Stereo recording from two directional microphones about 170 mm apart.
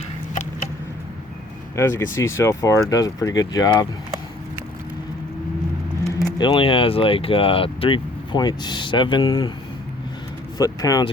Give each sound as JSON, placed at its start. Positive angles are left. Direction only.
{"t": 1.7, "sound": "speech", "side_deg": 15}
{"t": 6.1, "sound": "speech", "side_deg": 25}
{"t": 10.6, "sound": "speech", "side_deg": 20}